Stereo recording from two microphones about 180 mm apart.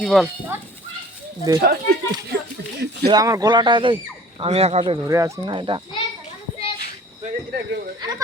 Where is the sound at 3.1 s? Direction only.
20° right (ahead or behind).